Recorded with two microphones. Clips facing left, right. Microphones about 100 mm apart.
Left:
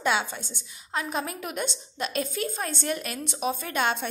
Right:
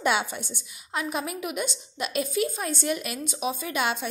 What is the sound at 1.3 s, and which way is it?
A woman's voice, 40° left (ahead or behind).